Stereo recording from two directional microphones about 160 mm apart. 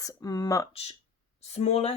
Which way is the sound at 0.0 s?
20° left (ahead or behind).